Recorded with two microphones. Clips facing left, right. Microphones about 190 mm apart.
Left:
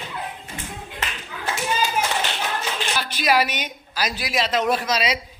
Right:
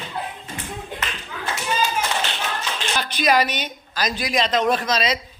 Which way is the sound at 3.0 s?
5° left (ahead or behind).